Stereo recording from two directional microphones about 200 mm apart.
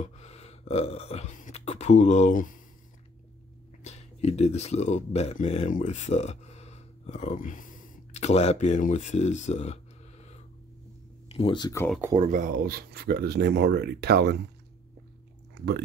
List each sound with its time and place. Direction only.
0.0 s beatboxing: 30° left (ahead or behind)
3.8 s speech: 35° left (ahead or behind)
12.2 s speech: 40° right (ahead or behind); by 14.3 s 55° right (ahead or behind)